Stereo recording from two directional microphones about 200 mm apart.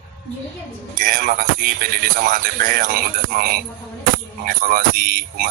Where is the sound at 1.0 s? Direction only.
45° right (ahead or behind).